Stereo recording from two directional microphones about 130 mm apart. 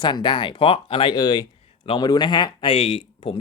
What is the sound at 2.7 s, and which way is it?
Speech, 50° left (ahead or behind).